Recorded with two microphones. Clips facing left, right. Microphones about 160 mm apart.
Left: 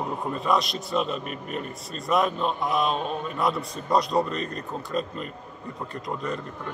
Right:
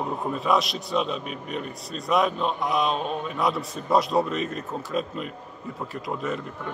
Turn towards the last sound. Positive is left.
turn(degrees=-5)  # may be behind; listen again after turning